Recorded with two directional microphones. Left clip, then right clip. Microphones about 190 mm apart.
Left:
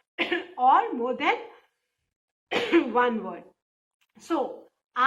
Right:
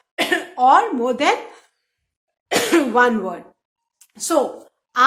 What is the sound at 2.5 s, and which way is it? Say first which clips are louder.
Speech: right 7 dB; 35° right (ahead or behind).